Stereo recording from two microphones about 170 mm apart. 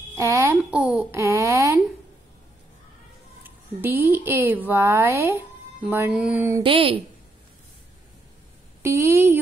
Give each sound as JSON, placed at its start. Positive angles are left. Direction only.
{"t": 0.1, "sound": "speech", "side_deg": -15}
{"t": 3.4, "sound": "a woman's voice", "side_deg": -10}
{"t": 6.6, "sound": "a woman's voice", "side_deg": -30}
{"t": 8.8, "sound": "speech", "side_deg": -15}